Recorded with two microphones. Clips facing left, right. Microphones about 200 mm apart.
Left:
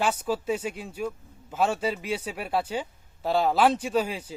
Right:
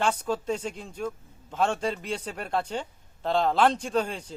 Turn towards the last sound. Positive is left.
turn(degrees=5)  # may be behind; listen again after turning